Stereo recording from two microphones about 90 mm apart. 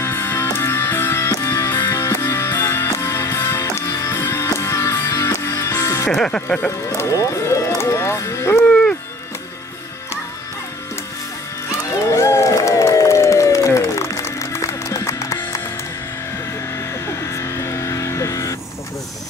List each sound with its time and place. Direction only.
0.0 s music: 25° left (ahead or behind)
6.1 s speech: 10° left (ahead or behind)
7.0 s music: 35° left (ahead or behind)
11.9 s run: 35° left (ahead or behind)
17.2 s music: 35° left (ahead or behind)